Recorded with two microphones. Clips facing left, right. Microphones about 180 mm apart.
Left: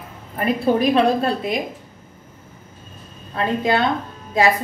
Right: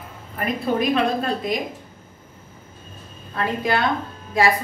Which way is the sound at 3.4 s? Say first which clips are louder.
Left 3 dB; 25° left (ahead or behind).